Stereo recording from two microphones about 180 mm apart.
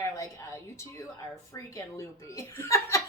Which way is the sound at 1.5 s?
20° left (ahead or behind).